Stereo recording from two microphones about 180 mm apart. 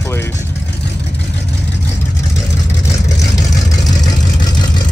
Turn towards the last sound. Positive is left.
turn(degrees=20)  # may be behind; listen again after turning